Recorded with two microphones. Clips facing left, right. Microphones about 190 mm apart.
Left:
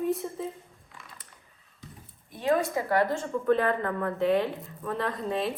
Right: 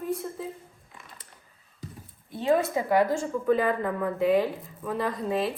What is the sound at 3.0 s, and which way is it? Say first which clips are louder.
Speech: right 1 dB; 5° right (ahead or behind).